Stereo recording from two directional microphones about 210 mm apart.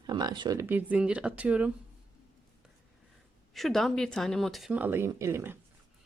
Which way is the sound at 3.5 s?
Centre (ahead or behind).